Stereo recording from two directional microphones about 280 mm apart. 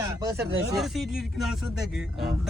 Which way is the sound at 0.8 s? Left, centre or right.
Centre.